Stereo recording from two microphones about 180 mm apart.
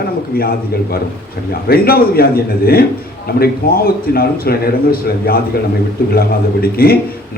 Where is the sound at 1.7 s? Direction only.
55° left (ahead or behind).